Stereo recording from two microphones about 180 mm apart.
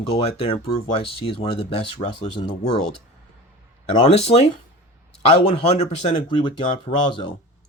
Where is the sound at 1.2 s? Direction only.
30° left (ahead or behind).